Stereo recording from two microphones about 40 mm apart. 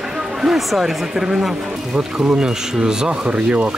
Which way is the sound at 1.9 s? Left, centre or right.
Right.